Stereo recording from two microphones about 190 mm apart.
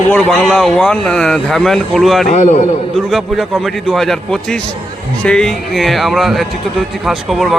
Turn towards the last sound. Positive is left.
turn(degrees=0)  # may be behind; listen again after turning